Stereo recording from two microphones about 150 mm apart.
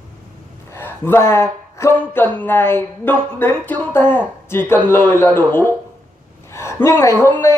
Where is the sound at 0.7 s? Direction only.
15° left (ahead or behind).